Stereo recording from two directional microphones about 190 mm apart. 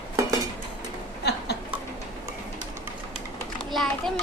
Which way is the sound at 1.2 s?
60° left (ahead or behind).